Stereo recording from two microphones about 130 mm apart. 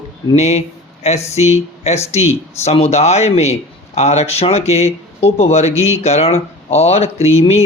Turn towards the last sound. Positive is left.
turn(degrees=55)  # may be behind; listen again after turning